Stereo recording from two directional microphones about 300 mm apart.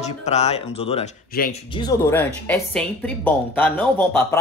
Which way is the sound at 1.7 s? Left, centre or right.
Centre.